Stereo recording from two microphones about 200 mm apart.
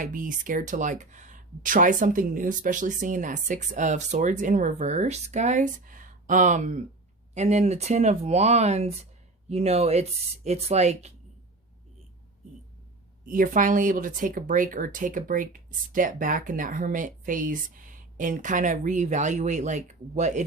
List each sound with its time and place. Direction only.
0.0 s speech: 40° right (ahead or behind)
13.2 s speech: 40° right (ahead or behind)